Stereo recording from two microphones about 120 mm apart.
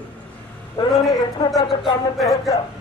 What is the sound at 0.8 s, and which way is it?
Speech, 35° left (ahead or behind).